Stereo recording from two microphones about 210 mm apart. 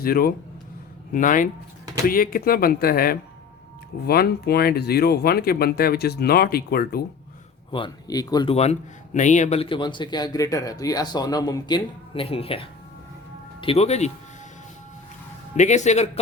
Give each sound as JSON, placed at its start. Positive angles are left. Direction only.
{"t": 0.0, "sound": "a man's voice", "side_deg": 45}
{"t": 7.7, "sound": "a man's voice", "side_deg": 20}
{"t": 8.5, "sound": "a man's voice", "side_deg": 30}
{"t": 15.5, "sound": "a man's voice", "side_deg": 35}